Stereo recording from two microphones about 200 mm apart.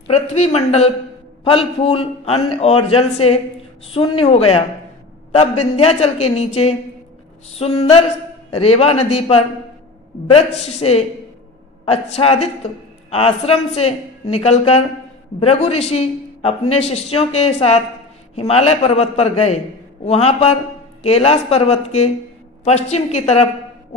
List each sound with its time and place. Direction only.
0.1 s a man's voice: 30° left (ahead or behind)